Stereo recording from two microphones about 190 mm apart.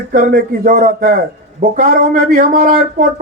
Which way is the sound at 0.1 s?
45° right (ahead or behind).